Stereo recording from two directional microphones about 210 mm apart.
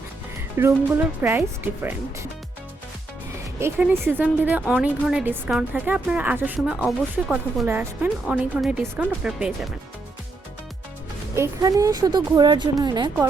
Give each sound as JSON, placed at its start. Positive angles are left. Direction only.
{"t": 0.6, "sound": "a woman's voice", "side_deg": -10}
{"t": 3.6, "sound": "a woman's voice", "side_deg": -10}
{"t": 11.3, "sound": "a woman's voice", "side_deg": -15}